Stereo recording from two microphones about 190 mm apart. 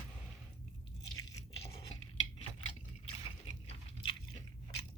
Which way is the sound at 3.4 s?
30° left (ahead or behind).